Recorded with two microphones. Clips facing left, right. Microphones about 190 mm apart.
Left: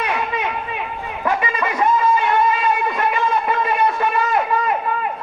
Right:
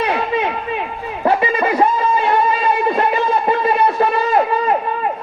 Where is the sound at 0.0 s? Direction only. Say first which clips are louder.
Right 4 dB; 30° right (ahead or behind).